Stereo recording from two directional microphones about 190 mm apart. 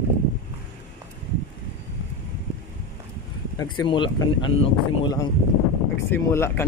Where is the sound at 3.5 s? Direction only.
25° left (ahead or behind).